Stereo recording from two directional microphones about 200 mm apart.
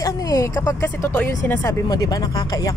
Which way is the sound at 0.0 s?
15° left (ahead or behind).